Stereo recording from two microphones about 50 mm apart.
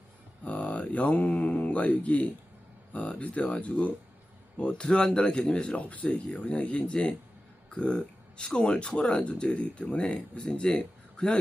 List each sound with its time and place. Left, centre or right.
0.4 s speech: left